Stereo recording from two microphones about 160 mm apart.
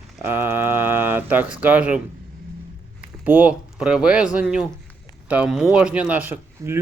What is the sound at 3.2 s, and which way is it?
Speech, 10° right (ahead or behind).